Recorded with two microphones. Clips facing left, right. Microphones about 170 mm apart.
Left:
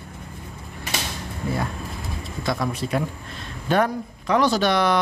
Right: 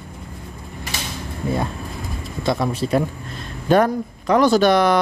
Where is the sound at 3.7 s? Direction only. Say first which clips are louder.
Right 5 dB; 45° right (ahead or behind).